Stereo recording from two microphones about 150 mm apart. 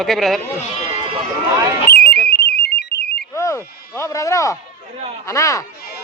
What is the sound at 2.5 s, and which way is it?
Alarm, 90° left.